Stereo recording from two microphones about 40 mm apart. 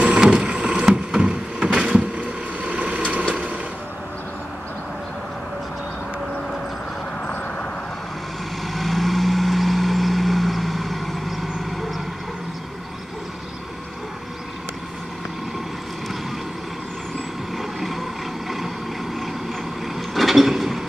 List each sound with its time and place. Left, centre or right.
0.2 s a sound: centre
1.2 s a sound: right
1.9 s vehicle: right
8.7 s vehicle: centre
17.6 s vehicle: centre
20.2 s mechanisms: centre